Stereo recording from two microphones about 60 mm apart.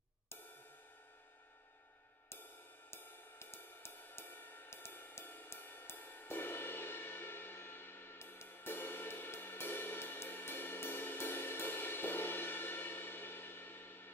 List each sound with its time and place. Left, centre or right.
2.9 s music: left